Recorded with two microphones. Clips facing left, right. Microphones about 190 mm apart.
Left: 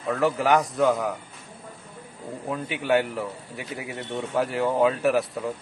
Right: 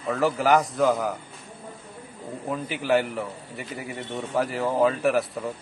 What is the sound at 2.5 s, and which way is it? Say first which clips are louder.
A man's voice: even; centre (ahead or behind).